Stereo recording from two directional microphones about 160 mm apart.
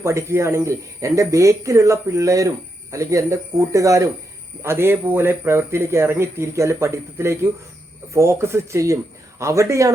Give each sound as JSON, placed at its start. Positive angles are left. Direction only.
{"t": 0.0, "sound": "speech", "side_deg": -20}